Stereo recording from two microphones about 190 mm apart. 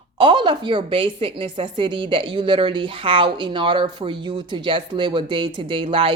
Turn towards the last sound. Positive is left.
turn(degrees=-30)  # may be behind; listen again after turning